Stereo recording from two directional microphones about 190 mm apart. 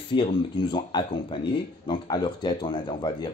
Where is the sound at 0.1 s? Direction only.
25° left (ahead or behind).